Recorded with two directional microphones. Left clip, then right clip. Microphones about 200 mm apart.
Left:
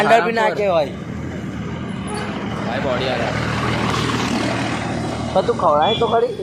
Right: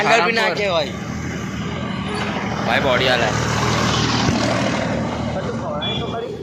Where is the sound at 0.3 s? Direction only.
45° left (ahead or behind).